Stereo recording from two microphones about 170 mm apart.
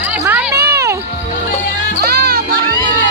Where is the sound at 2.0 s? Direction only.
65° right (ahead or behind).